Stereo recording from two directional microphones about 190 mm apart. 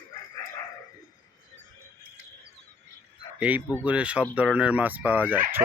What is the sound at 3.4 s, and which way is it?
Speech, 10° right (ahead or behind).